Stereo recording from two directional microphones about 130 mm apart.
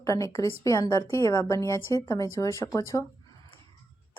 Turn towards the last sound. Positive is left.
turn(degrees=20)  # may be behind; listen again after turning